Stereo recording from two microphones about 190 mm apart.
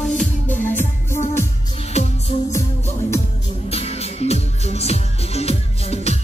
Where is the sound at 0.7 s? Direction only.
10° left (ahead or behind).